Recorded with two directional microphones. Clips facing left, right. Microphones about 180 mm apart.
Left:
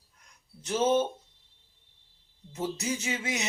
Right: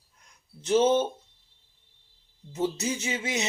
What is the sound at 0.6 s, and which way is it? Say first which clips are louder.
Speech: right 4 dB; 25° right (ahead or behind).